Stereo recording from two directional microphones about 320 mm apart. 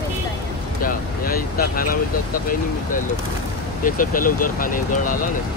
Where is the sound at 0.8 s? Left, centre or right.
Left.